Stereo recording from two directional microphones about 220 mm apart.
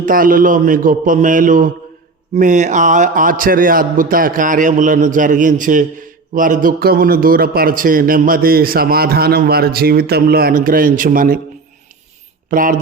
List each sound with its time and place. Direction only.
0.0 s speech: 40° right (ahead or behind)
12.5 s speech: 40° right (ahead or behind)